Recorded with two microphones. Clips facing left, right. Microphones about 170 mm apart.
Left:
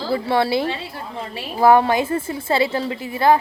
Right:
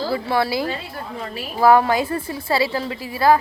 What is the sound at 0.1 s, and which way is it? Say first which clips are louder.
A woman's voice: left 5 dB; 30° left (ahead or behind).